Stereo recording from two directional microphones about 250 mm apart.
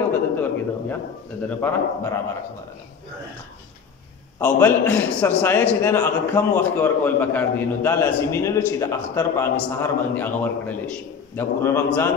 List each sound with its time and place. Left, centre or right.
0.1 s a sound: centre
1.6 s a man's voice: centre
4.4 s a man's voice: centre